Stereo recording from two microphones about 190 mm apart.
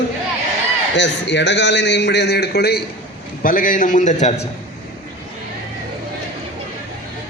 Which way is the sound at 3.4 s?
45° left (ahead or behind).